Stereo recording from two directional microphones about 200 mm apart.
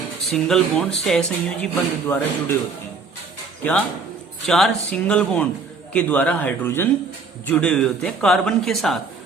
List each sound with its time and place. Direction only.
0.3 s speech: centre (ahead or behind)
3.6 s a man's voice: 5° left (ahead or behind)